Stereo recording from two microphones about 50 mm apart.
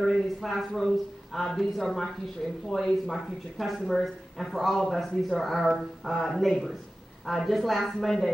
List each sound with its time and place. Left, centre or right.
0.0 s speech: centre